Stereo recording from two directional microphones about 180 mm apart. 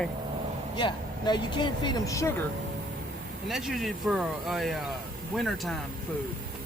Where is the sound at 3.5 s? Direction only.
Centre (ahead or behind).